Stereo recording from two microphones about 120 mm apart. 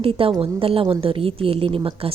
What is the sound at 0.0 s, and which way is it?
A woman's voice, 50° right (ahead or behind).